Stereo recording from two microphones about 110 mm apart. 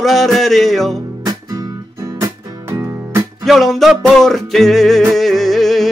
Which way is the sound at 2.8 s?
20° right (ahead or behind).